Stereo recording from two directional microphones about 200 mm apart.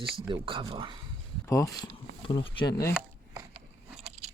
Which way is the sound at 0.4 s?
25° right (ahead or behind).